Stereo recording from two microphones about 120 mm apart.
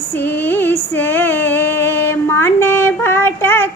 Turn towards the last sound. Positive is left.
turn(degrees=15)  # may be behind; listen again after turning